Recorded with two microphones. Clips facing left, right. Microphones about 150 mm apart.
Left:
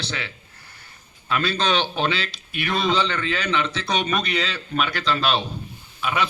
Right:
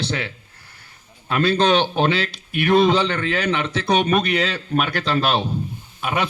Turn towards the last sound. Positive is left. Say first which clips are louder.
# right 1 dB
turn(degrees=-50)  # may be behind; listen again after turning